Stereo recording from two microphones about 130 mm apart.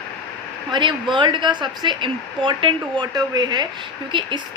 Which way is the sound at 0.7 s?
35° right (ahead or behind).